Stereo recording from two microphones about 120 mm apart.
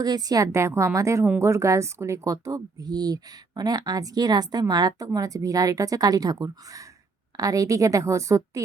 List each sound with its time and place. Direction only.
0.0 s speech: 35° right (ahead or behind)